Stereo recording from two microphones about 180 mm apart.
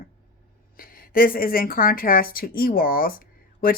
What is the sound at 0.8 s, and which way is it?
Speech, 50° left (ahead or behind).